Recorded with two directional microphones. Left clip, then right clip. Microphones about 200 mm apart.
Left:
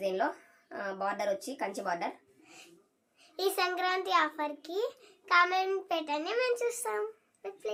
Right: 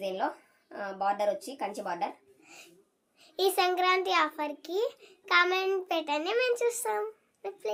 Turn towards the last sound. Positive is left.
turn(degrees=-20)  # may be behind; listen again after turning